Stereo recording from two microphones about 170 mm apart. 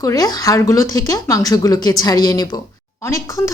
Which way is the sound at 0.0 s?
20° left (ahead or behind).